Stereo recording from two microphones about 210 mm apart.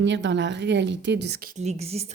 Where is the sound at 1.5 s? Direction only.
30° right (ahead or behind).